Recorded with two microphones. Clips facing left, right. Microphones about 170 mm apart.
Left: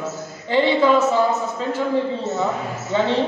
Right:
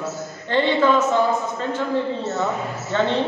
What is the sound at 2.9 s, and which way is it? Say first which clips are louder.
Speech: left 1 dB; 10° left (ahead or behind).